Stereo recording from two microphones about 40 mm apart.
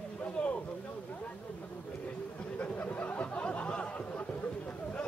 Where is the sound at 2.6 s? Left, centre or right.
Left.